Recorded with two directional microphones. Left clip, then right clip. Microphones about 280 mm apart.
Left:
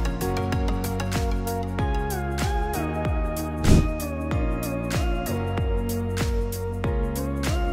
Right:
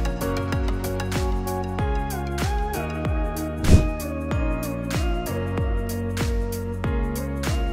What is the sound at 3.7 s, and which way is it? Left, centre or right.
Music, centre.